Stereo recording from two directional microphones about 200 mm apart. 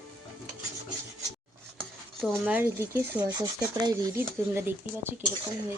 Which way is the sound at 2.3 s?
10° right (ahead or behind).